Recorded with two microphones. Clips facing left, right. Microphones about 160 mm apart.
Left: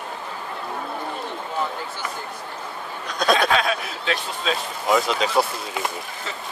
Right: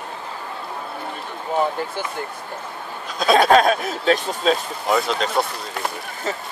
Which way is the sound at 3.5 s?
45° right (ahead or behind).